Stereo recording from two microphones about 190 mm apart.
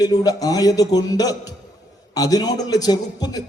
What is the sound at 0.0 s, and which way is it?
A man's voice, 20° left (ahead or behind).